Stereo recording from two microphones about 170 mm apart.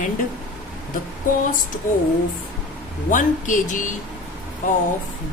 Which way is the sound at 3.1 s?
50° left (ahead or behind).